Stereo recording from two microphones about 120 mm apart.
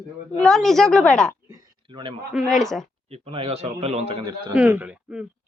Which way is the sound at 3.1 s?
50° right (ahead or behind).